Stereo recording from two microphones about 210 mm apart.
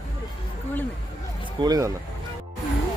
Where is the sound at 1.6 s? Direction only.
15° right (ahead or behind).